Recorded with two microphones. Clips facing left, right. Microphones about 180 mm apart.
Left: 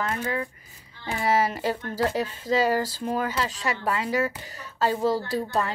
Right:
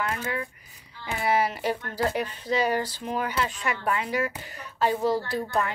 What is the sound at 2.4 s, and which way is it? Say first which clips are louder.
Speech: left 3 dB; 90° left.